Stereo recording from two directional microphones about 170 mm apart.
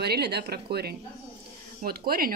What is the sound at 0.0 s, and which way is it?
Speech, 70° right (ahead or behind).